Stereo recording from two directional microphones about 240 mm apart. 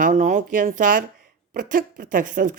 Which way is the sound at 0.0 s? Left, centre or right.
Right.